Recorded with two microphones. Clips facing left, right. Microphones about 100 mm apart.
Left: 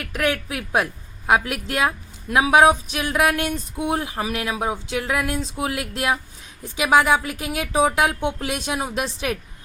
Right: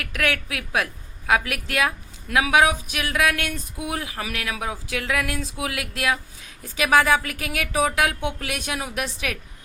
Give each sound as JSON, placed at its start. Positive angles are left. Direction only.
{"t": 0.0, "sound": "speech", "side_deg": 25}